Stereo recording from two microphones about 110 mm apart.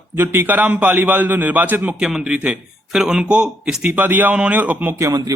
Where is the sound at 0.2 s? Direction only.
20° right (ahead or behind).